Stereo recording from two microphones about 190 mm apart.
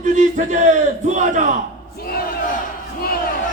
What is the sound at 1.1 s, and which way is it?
Speech, 40° right (ahead or behind).